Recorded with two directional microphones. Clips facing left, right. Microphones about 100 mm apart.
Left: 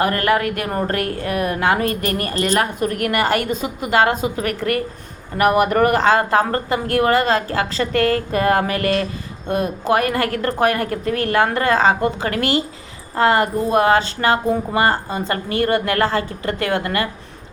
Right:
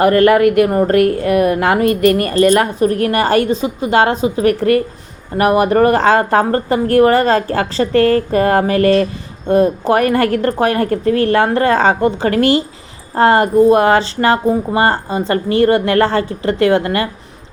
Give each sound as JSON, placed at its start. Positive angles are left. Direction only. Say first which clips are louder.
{"t": 0.2, "sound": "a woman's voice", "louder": "right 9 dB", "side_deg": -30}
{"t": 2.0, "sound": "speech", "louder": "right 11 dB", "side_deg": 30}
{"t": 2.6, "sound": "a woman's voice", "louder": "right 6 dB", "side_deg": -30}